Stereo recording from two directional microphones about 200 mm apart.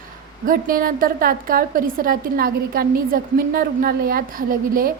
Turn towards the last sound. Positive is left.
turn(degrees=-45)  # may be behind; listen again after turning